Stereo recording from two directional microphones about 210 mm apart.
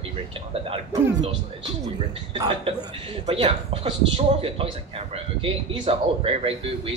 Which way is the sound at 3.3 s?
30° right (ahead or behind).